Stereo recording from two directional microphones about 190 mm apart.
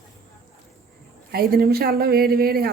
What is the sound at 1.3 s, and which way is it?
Speech, 55° right (ahead or behind).